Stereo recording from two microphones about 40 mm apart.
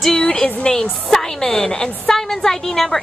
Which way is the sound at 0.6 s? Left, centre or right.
Left.